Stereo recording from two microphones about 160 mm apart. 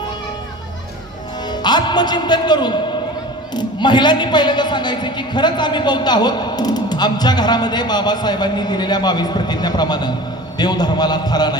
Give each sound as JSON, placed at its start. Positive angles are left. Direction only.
{"t": 1.5, "sound": "a man's voice", "side_deg": 25}